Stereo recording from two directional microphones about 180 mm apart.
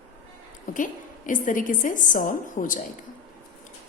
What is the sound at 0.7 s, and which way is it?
A woman's voice, 45° left (ahead or behind).